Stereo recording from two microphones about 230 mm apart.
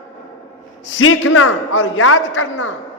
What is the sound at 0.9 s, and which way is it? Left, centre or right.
A man's voice, left.